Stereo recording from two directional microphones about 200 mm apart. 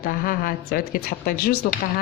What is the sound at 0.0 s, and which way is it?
A woman's voice, 45° left (ahead or behind).